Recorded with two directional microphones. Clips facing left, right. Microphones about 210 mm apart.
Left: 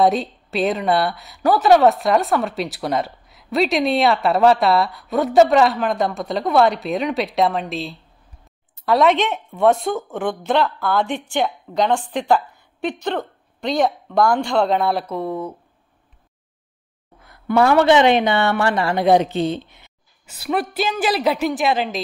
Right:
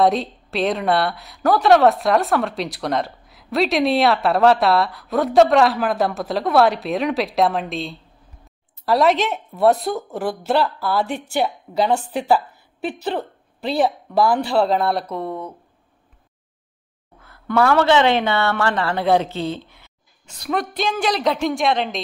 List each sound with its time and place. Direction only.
0.0 s a woman's voice: centre (ahead or behind)
17.2 s a woman's voice: 15° left (ahead or behind)
20.2 s a woman's voice: 5° left (ahead or behind)